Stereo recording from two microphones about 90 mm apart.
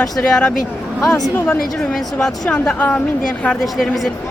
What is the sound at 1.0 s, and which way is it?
Speech, 40° left (ahead or behind).